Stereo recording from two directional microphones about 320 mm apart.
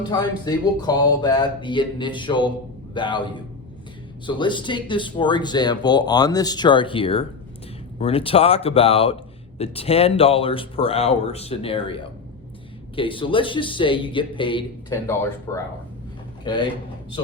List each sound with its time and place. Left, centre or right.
0.1 s speech: centre
13.0 s a man's voice: centre